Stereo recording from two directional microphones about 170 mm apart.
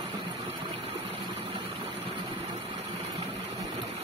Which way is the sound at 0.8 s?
35° right (ahead or behind).